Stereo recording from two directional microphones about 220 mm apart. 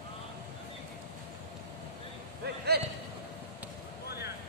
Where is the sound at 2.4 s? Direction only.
45° right (ahead or behind).